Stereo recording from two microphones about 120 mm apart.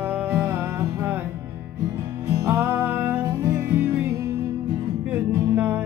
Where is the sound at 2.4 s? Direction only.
20° right (ahead or behind).